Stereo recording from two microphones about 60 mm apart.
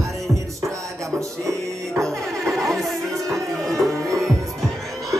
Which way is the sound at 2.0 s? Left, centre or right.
Centre.